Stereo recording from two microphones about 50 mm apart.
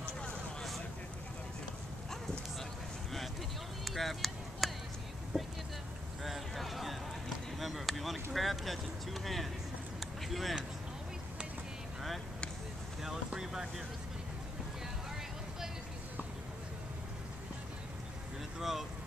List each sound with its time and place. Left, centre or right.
0.2 s a sound: centre
3.8 s chop: centre
5.3 s speech: centre
6.2 s a sound: centre
10.2 s speech: centre
13.0 s boat: centre
18.6 s vehicle: centre